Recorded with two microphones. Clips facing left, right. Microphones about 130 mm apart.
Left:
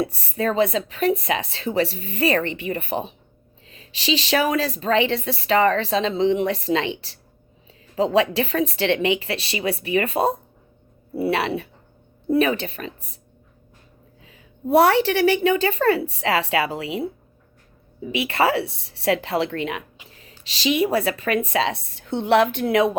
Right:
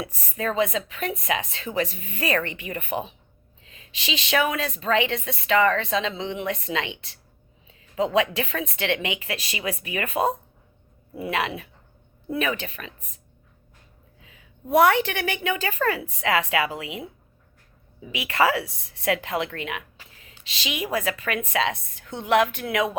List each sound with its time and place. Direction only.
0.2 s a woman's voice: 30° left (ahead or behind)
14.2 s a woman's voice: 35° left (ahead or behind)